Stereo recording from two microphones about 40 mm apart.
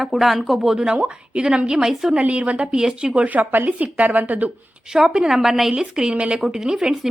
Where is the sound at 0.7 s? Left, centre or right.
Centre.